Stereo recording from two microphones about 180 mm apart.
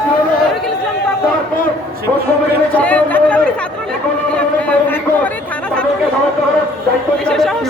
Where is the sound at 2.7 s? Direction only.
5° left (ahead or behind).